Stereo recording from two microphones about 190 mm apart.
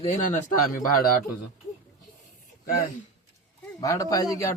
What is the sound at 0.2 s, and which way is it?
Speech, 45° left (ahead or behind).